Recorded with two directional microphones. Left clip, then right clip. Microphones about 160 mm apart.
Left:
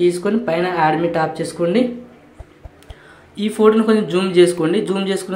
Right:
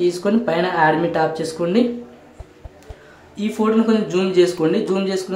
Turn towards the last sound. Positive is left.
turn(degrees=5)  # may be behind; listen again after turning